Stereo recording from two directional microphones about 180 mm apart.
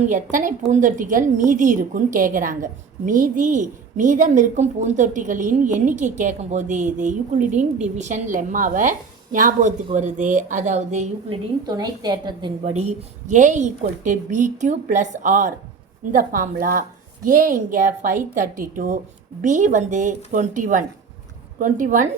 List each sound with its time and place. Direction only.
0.0 s a woman's voice: 45° right (ahead or behind)
11.6 s a woman's voice: 20° right (ahead or behind)
13.2 s a woman's voice: 45° right (ahead or behind)